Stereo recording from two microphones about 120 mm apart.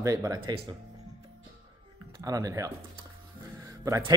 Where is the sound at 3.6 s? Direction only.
30° right (ahead or behind).